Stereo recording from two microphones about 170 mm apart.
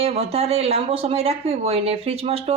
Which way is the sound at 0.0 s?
35° right (ahead or behind).